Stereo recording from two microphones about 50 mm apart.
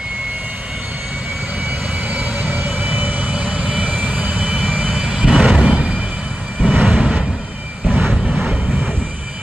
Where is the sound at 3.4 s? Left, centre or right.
Right.